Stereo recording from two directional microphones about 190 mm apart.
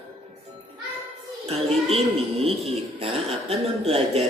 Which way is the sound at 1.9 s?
35° right (ahead or behind).